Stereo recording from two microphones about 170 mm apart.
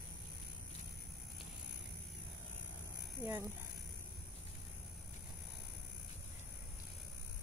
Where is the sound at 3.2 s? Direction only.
15° right (ahead or behind).